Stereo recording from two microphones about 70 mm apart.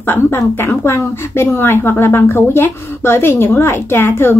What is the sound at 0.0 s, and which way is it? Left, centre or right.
A woman's voice, left.